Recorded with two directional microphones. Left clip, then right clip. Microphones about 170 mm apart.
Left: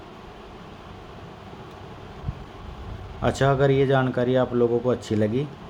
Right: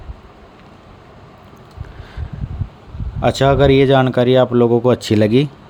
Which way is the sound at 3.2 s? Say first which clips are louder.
Right 8 dB; 40° right (ahead or behind).